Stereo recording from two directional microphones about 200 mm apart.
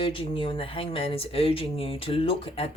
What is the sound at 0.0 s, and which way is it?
Speech, 25° left (ahead or behind).